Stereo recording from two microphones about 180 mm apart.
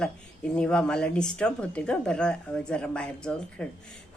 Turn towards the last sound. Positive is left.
turn(degrees=5)  # may be behind; listen again after turning